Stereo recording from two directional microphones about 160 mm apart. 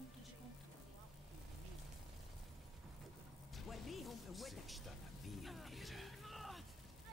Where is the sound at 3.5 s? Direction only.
Centre (ahead or behind).